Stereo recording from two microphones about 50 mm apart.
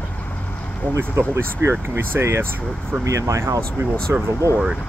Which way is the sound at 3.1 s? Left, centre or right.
Right.